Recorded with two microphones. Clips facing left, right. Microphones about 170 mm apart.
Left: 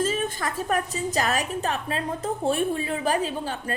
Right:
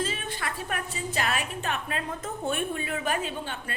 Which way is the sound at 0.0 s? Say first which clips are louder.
Left 6 dB; 45° left (ahead or behind).